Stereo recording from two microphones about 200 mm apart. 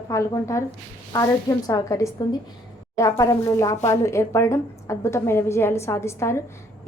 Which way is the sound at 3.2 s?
15° left (ahead or behind).